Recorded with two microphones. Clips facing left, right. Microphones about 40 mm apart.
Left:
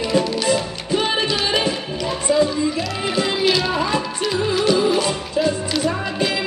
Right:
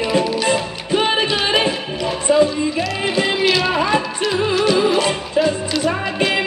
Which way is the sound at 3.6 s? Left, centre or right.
Right.